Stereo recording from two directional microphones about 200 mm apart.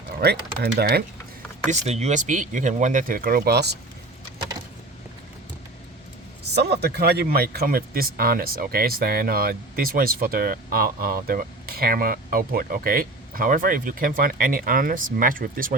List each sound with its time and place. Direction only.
0.2 s speech: 55° right (ahead or behind)
1.7 s speech: 35° right (ahead or behind); by 3.8 s 55° right (ahead or behind)
6.4 s speech: 55° right (ahead or behind)